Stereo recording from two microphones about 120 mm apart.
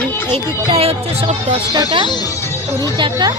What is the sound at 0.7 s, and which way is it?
Speech, 55° right (ahead or behind).